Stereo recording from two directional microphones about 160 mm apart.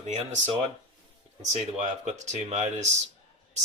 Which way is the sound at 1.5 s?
45° right (ahead or behind).